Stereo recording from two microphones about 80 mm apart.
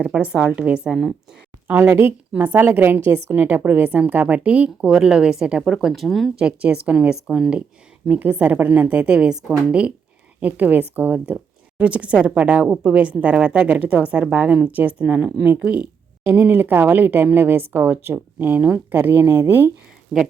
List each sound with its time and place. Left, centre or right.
0.0 s a woman's voice: centre
1.6 s a woman's voice: right; by 6.3 s centre
6.4 s a woman's voice: centre
8.0 s a woman's voice: centre